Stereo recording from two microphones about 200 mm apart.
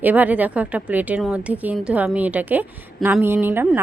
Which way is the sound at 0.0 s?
10° right (ahead or behind).